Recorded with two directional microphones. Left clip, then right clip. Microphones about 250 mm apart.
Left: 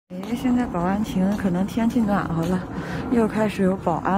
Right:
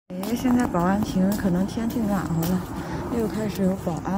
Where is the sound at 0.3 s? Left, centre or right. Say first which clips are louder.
Right 1 dB; centre.